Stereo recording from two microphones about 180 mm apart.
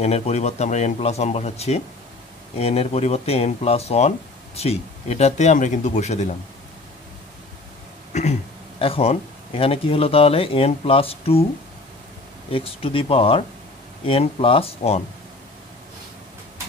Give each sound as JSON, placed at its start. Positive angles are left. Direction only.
{"t": 0.0, "sound": "speech", "side_deg": 35}
{"t": 8.1, "sound": "speech", "side_deg": 40}
{"t": 12.4, "sound": "speech", "side_deg": 30}